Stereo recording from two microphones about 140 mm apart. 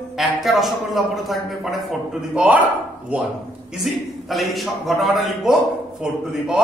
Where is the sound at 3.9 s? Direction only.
Centre (ahead or behind).